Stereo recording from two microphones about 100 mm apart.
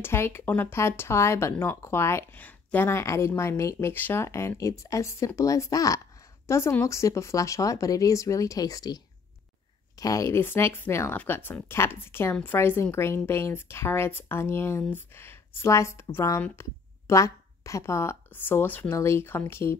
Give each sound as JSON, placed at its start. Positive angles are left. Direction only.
{"t": 0.0, "sound": "speech", "side_deg": 25}